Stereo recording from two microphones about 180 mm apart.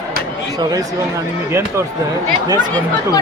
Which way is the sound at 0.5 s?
20° right (ahead or behind).